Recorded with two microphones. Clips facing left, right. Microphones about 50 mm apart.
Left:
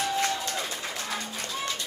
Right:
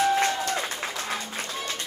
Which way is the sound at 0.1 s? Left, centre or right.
Right.